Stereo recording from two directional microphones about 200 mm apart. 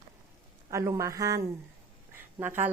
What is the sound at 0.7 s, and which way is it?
Speech, 15° right (ahead or behind).